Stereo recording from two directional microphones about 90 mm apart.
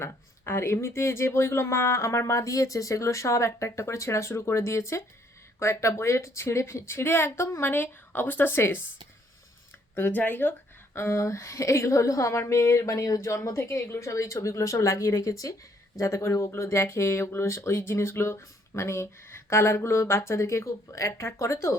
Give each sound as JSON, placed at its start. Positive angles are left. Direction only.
{"t": 0.0, "sound": "a woman's voice", "side_deg": 30}
{"t": 9.9, "sound": "a woman's voice", "side_deg": 20}
{"t": 10.9, "sound": "speech", "side_deg": 30}